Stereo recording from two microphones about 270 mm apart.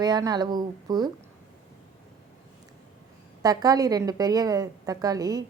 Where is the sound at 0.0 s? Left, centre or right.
Centre.